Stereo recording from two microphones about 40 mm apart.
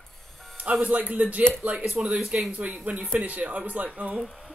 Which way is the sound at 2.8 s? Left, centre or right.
Right.